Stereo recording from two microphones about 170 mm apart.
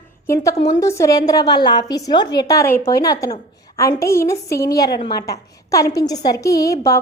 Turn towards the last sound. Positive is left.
turn(degrees=20)  # may be behind; listen again after turning